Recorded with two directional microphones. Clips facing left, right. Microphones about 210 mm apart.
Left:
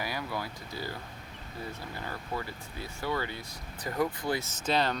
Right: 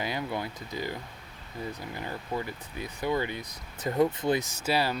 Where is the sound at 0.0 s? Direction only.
20° right (ahead or behind).